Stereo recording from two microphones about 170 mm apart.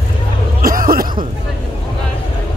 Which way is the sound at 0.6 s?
55° right (ahead or behind).